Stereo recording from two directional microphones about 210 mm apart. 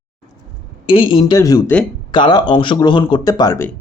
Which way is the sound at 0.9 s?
25° left (ahead or behind).